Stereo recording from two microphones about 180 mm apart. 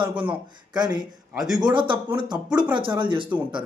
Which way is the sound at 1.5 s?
25° right (ahead or behind).